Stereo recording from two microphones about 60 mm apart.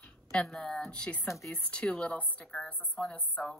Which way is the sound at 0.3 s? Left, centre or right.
Centre.